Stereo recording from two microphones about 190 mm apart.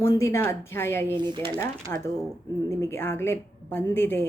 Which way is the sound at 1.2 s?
25° right (ahead or behind).